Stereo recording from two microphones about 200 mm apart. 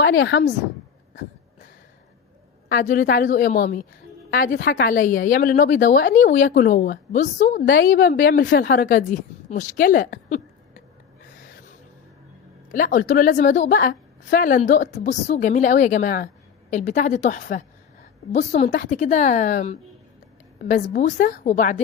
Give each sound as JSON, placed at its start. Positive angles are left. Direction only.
{"t": 0.0, "sound": "speech", "side_deg": 70}
{"t": 2.6, "sound": "a woman's voice", "side_deg": 40}
{"t": 12.7, "sound": "a woman's voice", "side_deg": 40}
{"t": 20.9, "sound": "a woman's voice", "side_deg": 40}